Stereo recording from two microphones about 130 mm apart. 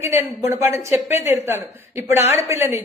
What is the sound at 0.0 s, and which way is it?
A man's voice, 20° right (ahead or behind).